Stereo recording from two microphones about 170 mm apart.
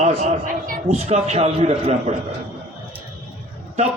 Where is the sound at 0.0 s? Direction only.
40° right (ahead or behind).